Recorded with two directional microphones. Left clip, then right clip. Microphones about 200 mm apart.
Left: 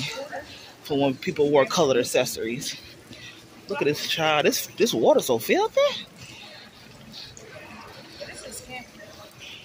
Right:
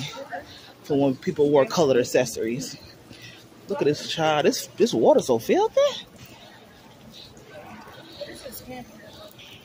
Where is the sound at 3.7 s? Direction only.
25° right (ahead or behind).